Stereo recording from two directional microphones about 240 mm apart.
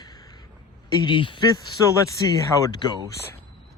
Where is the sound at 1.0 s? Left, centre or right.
Centre.